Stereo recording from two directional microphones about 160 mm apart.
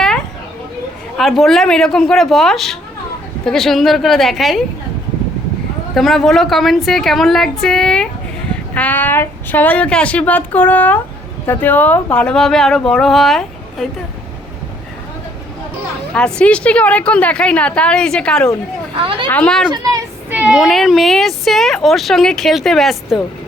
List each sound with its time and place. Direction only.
1.1 s speech: centre (ahead or behind)
5.9 s a woman's voice: centre (ahead or behind)
16.1 s a woman's voice: 5° left (ahead or behind)
18.9 s speech: 35° right (ahead or behind)
19.3 s speech: 5° left (ahead or behind)
20.3 s speech: 5° right (ahead or behind)